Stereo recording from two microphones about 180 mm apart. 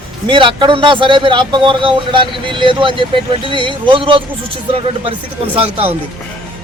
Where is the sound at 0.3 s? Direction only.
25° right (ahead or behind).